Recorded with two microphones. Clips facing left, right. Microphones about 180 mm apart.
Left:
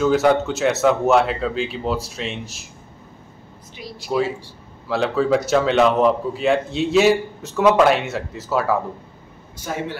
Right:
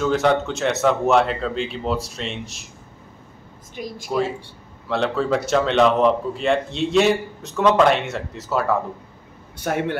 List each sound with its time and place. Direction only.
0.0 s a man's voice: 5° left (ahead or behind)
3.7 s speech: 50° right (ahead or behind)
4.8 s a man's voice: centre (ahead or behind)
9.6 s a man's voice: 60° right (ahead or behind)